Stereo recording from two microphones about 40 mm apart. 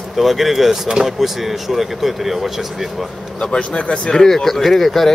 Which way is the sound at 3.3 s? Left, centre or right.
Left.